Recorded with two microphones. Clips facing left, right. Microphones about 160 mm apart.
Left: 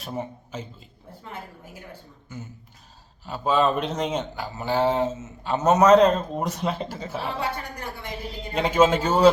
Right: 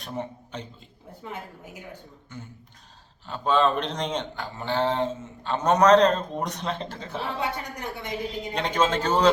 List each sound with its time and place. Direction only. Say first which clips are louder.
0.0 s a man's voice: left 1 dB; 5° left (ahead or behind)
1.2 s a woman's voice: right 2 dB; 20° right (ahead or behind)
2.3 s a man's voice: left 3 dB; 5° left (ahead or behind)
7.3 s a woman's voice: even; 20° right (ahead or behind)
8.5 s a man's voice: left 5 dB; 5° left (ahead or behind)